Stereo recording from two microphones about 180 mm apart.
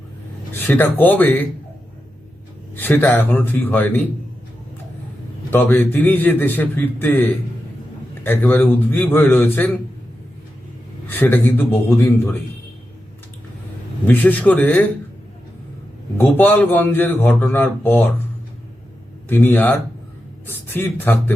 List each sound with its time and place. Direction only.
0.7 s a man's voice: 10° left (ahead or behind)
2.7 s a man's voice: 10° left (ahead or behind)
5.5 s a man's voice: 10° left (ahead or behind)
11.1 s a man's voice: 10° left (ahead or behind)
14.0 s a man's voice: 10° left (ahead or behind)
16.4 s a man's voice: 10° left (ahead or behind)
19.3 s a man's voice: 10° left (ahead or behind)